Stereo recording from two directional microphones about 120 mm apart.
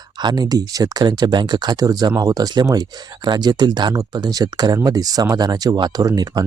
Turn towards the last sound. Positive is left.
turn(degrees=-35)  # may be behind; listen again after turning